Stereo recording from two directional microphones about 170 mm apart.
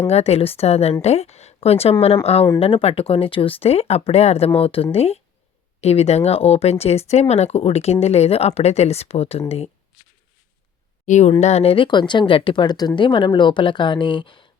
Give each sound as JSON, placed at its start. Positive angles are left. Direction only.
{"t": 0.1, "sound": "speech", "side_deg": 35}
{"t": 11.0, "sound": "speech", "side_deg": 45}